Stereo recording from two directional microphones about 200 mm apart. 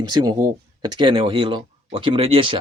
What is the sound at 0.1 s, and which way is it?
Speech, 20° right (ahead or behind).